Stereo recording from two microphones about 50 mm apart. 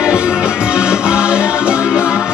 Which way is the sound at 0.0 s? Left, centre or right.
Centre.